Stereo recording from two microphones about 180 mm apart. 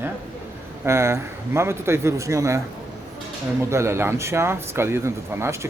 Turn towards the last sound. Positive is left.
turn(degrees=-15)  # may be behind; listen again after turning